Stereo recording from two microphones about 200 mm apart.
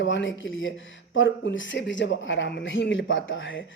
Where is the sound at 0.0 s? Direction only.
65° left (ahead or behind).